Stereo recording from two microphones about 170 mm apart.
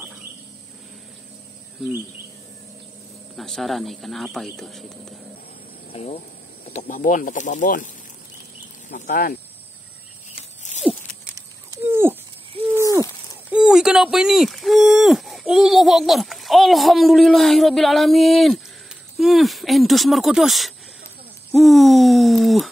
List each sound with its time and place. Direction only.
3.3 s speech: centre (ahead or behind)
5.9 s speech: 35° left (ahead or behind)
8.9 s speech: 55° left (ahead or behind)
10.8 s a sound: 10° right (ahead or behind)
11.3 s dog: 15° right (ahead or behind)
12.7 s a sound: 20° right (ahead or behind)
13.5 s speech: 5° right (ahead or behind)